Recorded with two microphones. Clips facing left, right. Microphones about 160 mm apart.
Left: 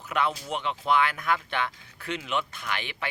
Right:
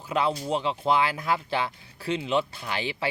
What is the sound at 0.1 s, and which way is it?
Speech, 30° right (ahead or behind).